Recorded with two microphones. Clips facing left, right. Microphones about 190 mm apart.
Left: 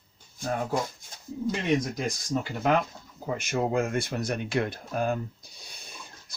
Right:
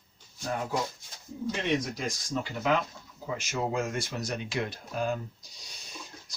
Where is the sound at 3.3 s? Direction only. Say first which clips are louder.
Left 4 dB; 50° left (ahead or behind).